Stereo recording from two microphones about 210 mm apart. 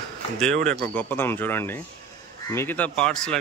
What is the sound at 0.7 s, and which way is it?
Speech, 10° left (ahead or behind).